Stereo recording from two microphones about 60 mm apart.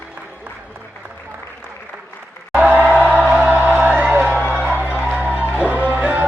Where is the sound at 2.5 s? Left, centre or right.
Right.